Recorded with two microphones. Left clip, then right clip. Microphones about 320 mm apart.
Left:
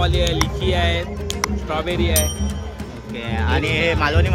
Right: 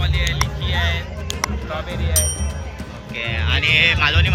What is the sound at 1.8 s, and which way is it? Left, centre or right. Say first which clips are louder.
Speech: left 6 dB; left.